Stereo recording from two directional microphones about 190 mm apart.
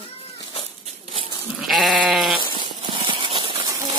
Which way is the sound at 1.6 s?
Centre (ahead or behind).